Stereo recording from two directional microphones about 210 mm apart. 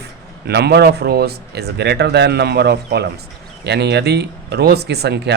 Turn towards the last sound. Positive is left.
turn(degrees=-50)  # may be behind; listen again after turning